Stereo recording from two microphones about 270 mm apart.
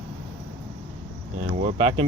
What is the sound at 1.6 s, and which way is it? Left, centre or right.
Speech, right.